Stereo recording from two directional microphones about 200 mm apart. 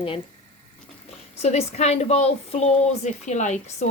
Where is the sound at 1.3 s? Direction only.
30° left (ahead or behind).